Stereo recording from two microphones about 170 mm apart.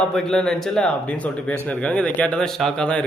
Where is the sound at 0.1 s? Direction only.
5° left (ahead or behind).